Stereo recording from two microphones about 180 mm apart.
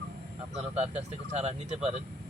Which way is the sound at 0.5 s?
35° right (ahead or behind).